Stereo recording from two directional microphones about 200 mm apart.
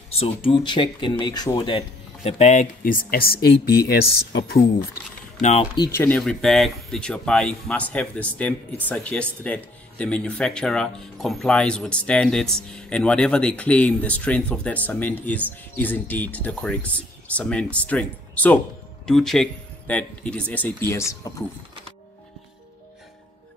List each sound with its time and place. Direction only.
0.1 s speech: 30° left (ahead or behind); by 4.6 s 55° left (ahead or behind)
5.4 s speech: 35° left (ahead or behind)
5.8 s speech: 10° left (ahead or behind)